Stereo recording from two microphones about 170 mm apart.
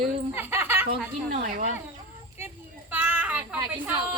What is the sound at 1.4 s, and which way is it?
Speech, 50° right (ahead or behind).